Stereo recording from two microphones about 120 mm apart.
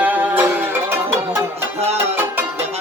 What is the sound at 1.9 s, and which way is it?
Music, 20° right (ahead or behind).